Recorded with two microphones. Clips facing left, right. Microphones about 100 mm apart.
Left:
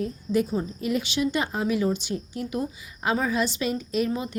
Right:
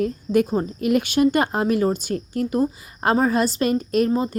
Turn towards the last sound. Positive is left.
turn(degrees=-40)  # may be behind; listen again after turning